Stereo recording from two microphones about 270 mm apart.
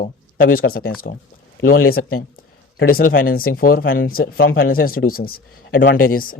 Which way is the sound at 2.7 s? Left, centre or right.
Left.